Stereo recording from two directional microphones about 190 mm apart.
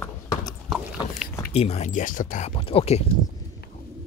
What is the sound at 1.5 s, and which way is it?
Speech, 35° left (ahead or behind).